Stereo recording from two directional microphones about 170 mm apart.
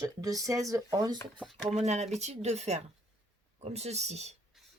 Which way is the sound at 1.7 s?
40° right (ahead or behind).